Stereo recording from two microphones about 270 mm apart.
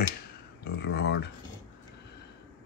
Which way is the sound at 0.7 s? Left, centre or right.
Left.